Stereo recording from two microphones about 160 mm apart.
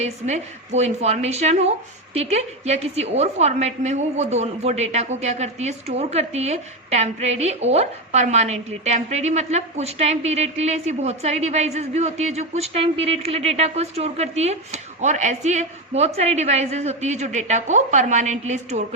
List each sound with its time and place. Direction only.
0.0 s a woman's voice: 45° right (ahead or behind)